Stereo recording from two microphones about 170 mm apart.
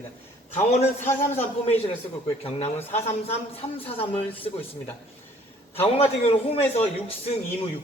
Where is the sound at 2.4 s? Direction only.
40° left (ahead or behind).